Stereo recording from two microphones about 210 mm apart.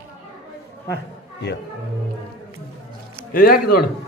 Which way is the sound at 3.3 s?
45° left (ahead or behind).